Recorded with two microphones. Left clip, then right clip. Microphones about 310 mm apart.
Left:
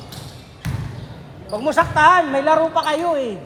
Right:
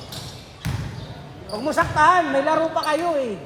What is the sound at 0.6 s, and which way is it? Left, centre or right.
Basketball bounce, centre.